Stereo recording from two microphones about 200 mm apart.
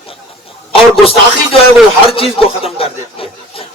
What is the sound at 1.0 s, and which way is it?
A man's voice, 30° left (ahead or behind).